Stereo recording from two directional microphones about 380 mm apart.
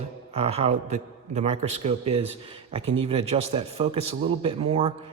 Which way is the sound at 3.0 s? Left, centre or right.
Centre.